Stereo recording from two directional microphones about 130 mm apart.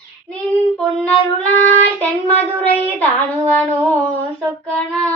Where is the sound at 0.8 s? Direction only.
Centre (ahead or behind).